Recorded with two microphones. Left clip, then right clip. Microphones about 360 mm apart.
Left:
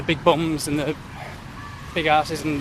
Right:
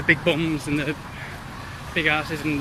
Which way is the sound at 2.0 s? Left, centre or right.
Centre.